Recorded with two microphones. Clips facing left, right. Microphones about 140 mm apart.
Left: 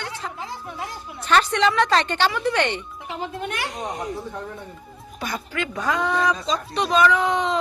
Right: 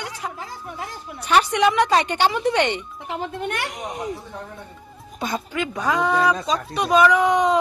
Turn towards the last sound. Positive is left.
turn(degrees=-15)  # may be behind; listen again after turning